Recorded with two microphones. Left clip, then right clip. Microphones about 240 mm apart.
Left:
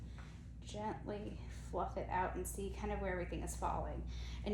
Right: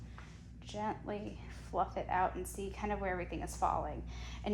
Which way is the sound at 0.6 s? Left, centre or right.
Right.